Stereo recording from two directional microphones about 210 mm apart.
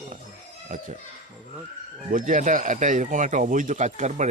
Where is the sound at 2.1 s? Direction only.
40° right (ahead or behind).